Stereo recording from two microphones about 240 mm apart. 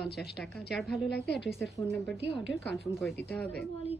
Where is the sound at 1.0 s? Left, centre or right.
Left.